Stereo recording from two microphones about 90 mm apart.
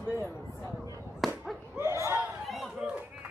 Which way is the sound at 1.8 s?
30° right (ahead or behind).